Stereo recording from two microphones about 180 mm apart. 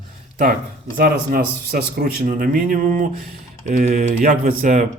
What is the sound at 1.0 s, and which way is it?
Speech, 55° right (ahead or behind).